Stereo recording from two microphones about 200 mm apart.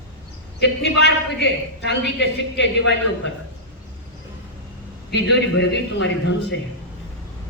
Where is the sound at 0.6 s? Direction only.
60° left (ahead or behind).